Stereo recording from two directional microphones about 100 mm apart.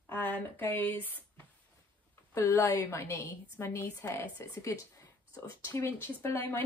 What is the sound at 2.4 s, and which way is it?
A woman's voice, 20° left (ahead or behind).